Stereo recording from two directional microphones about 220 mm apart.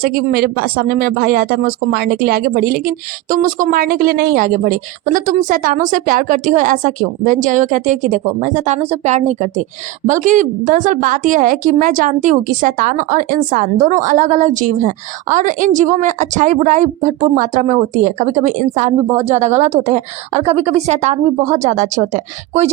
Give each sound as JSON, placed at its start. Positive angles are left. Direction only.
{"t": 0.0, "sound": "a woman's voice", "side_deg": -40}